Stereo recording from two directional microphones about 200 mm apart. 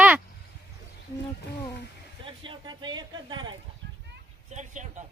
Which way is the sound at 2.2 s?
25° right (ahead or behind).